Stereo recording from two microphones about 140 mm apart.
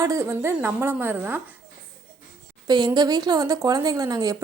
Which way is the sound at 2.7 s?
30° right (ahead or behind).